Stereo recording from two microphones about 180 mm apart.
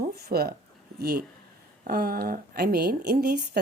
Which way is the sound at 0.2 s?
60° right (ahead or behind).